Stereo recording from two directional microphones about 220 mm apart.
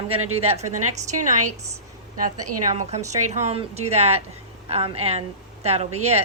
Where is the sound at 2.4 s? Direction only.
90° right.